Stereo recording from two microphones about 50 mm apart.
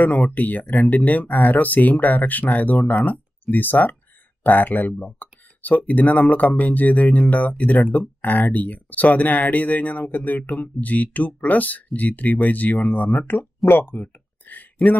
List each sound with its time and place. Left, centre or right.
0.0 s speech: left
13.7 s speech: left